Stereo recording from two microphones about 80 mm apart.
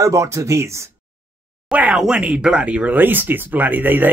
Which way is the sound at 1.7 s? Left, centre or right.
Centre.